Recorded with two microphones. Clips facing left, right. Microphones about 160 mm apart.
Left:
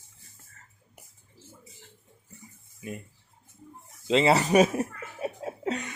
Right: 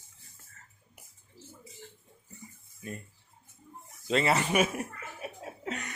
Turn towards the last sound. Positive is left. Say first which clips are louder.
# left 7 dB
turn(degrees=35)  # may be behind; listen again after turning